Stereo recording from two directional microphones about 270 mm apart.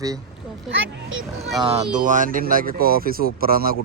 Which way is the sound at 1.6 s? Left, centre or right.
Right.